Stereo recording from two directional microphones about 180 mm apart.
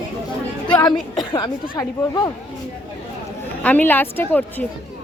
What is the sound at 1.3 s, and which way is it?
Speech, 20° left (ahead or behind).